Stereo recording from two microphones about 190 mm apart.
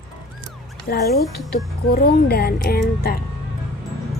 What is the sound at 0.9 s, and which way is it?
A woman's voice, 55° left (ahead or behind).